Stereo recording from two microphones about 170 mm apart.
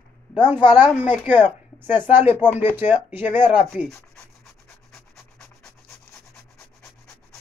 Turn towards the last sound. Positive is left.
turn(degrees=0)  # may be behind; listen again after turning